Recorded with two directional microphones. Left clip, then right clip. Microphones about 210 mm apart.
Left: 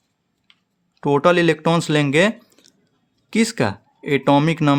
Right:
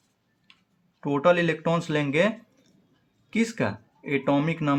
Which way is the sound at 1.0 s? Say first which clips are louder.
Left 6 dB; 55° left (ahead or behind).